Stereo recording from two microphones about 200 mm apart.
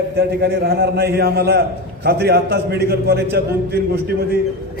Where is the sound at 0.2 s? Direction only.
50° right (ahead or behind).